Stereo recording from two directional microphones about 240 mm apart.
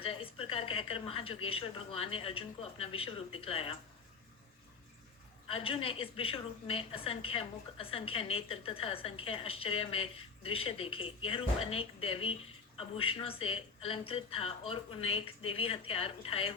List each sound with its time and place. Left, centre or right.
0.0 s a sound: left
1.5 s a woman's voice: left
5.5 s a woman's voice: left